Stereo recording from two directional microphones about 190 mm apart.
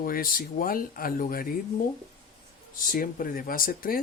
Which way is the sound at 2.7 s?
45° left (ahead or behind).